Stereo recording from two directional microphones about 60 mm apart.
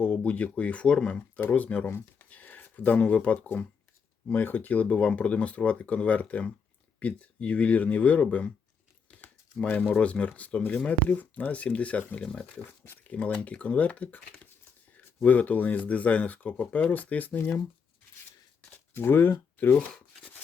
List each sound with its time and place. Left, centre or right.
0.0 s speech: left
1.4 s speech: left
9.2 s crumpling: left
9.9 s speech: centre
18.9 s speech: left
19.9 s a sound: centre